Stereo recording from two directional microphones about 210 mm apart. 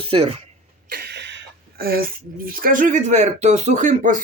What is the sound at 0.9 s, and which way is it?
Speech, 50° right (ahead or behind).